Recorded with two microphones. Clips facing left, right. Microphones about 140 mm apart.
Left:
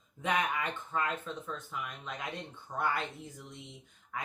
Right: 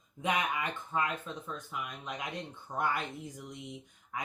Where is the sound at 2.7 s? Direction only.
15° right (ahead or behind).